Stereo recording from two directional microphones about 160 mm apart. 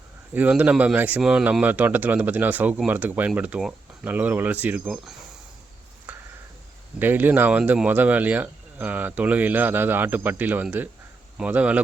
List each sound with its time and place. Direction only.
0.3 s speech: 10° right (ahead or behind)
6.1 s a sound: 10° right (ahead or behind)
7.0 s speech: 10° right (ahead or behind)